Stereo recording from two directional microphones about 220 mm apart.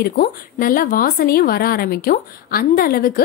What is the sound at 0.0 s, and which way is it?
A woman's voice, 40° left (ahead or behind).